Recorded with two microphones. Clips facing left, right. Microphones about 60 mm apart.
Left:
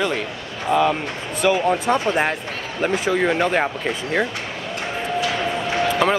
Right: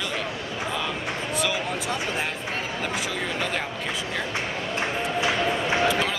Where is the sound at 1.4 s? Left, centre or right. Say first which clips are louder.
Left 13 dB; left.